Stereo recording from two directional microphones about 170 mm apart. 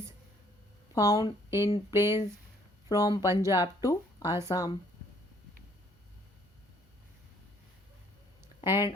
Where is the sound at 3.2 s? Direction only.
15° right (ahead or behind).